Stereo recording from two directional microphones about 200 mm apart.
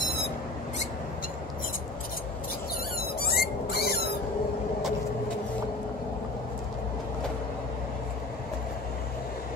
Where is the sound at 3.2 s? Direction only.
50° left (ahead or behind).